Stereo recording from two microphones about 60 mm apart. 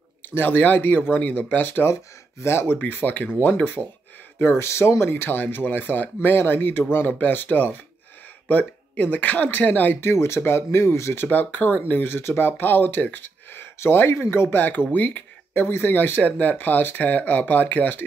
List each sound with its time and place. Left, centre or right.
0.3 s speech: left
4.4 s speech: left
9.9 s speech: left
11.2 s speech: left